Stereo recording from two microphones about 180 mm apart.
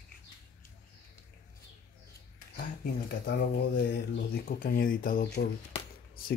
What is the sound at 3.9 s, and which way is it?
Speech, 55° left (ahead or behind).